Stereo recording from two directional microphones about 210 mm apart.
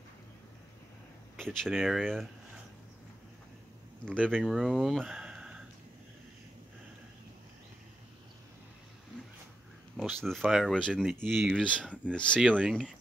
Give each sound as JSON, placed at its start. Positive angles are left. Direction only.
{"t": 1.3, "sound": "speech", "side_deg": 0}
{"t": 4.2, "sound": "speech", "side_deg": -5}
{"t": 9.9, "sound": "speech", "side_deg": 0}